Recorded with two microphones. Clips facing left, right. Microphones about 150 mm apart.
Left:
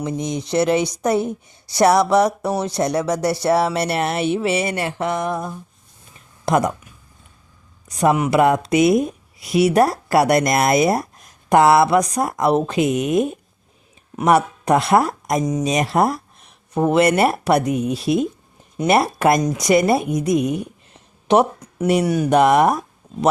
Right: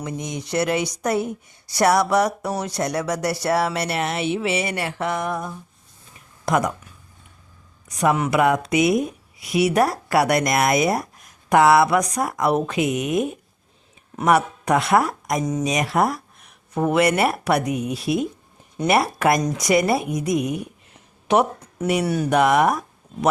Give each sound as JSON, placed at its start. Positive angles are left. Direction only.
{"t": 0.0, "sound": "speech", "side_deg": 25}
{"t": 4.1, "sound": "speech", "side_deg": 40}
{"t": 4.7, "sound": "speech", "side_deg": 25}
{"t": 8.3, "sound": "speech", "side_deg": 30}
{"t": 14.3, "sound": "speech", "side_deg": 30}
{"t": 22.0, "sound": "speech", "side_deg": 15}
{"t": 22.3, "sound": "speech", "side_deg": 30}